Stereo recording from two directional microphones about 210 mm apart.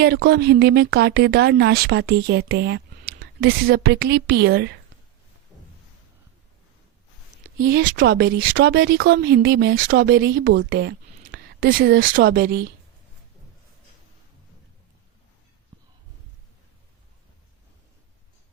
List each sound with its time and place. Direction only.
0.0 s speech: 50° right (ahead or behind)
7.4 s speech: 50° right (ahead or behind)
10.7 s a sound: 50° right (ahead or behind)
12.1 s speech: 45° right (ahead or behind)